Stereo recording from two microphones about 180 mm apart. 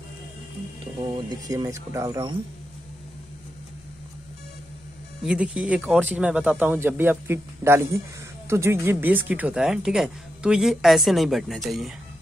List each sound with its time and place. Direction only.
1.0 s speech: 25° right (ahead or behind)
5.2 s speech: 5° right (ahead or behind)